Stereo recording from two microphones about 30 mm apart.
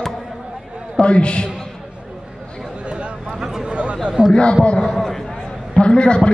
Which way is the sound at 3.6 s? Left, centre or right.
Right.